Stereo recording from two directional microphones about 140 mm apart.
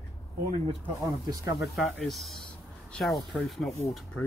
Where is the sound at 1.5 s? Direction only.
Centre (ahead or behind).